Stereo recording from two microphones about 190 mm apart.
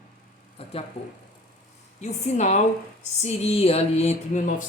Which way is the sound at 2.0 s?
40° left (ahead or behind).